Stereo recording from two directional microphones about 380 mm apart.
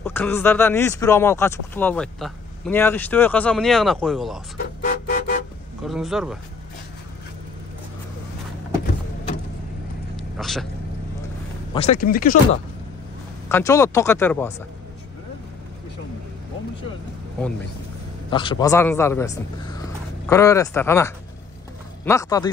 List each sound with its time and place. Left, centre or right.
0.0 s speech: centre
4.8 s vehicle: left
5.9 s speech: centre
10.1 s vehicle: centre
11.7 s speech: centre
13.5 s speech: centre
18.3 s a man's voice: centre